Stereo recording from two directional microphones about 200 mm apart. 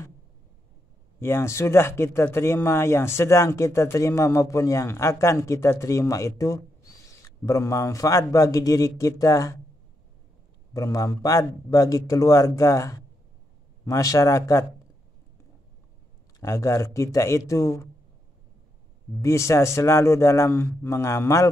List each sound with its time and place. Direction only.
1.2 s speech: 15° left (ahead or behind)
10.7 s speech: 15° left (ahead or behind)
16.3 s speech: 15° left (ahead or behind)
19.2 s speech: 15° left (ahead or behind)